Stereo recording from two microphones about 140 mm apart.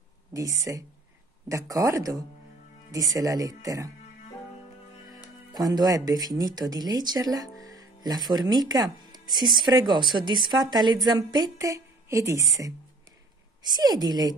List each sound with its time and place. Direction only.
0.3 s speech: 25° right (ahead or behind)
5.5 s speech: 30° right (ahead or behind)
13.7 s speech: 30° right (ahead or behind)